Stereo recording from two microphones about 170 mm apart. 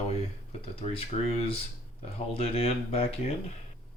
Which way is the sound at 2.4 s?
35° left (ahead or behind).